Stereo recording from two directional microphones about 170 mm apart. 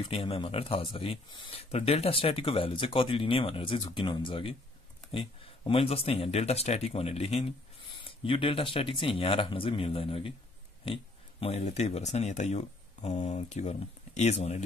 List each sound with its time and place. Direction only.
0.0 s speech: 30° left (ahead or behind)